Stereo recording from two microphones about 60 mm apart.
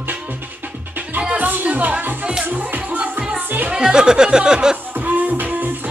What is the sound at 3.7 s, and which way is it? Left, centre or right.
Speech, centre.